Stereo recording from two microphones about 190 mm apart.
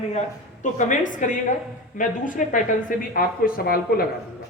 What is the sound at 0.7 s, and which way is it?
A woman's voice, 40° left (ahead or behind).